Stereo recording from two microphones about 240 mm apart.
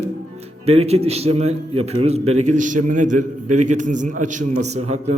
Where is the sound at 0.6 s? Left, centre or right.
Right.